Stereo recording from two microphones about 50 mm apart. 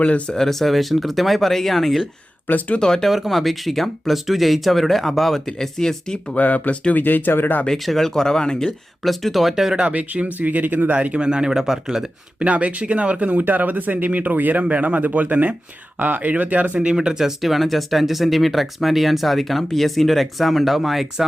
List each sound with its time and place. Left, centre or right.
0.3 s speech: centre
2.5 s speech: left
2.7 s speech: centre
3.1 s speech: centre
6.3 s speech: left
7.0 s speech: left
7.7 s speech: centre
9.0 s speech: centre
9.8 s speech: right; by 12.0 s centre
12.4 s speech: right
16.8 s speech: centre